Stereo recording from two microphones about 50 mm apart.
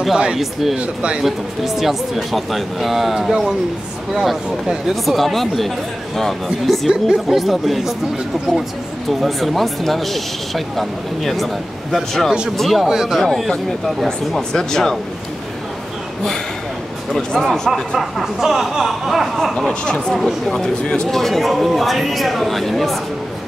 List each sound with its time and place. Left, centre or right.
0.4 s speech: centre
0.7 s speech: centre
1.2 s speech: centre
9.2 s speech: centre
12.9 s speech: centre
13.2 s speech: centre
17.4 s speech: centre
19.7 s speech: centre
20.2 s speech: centre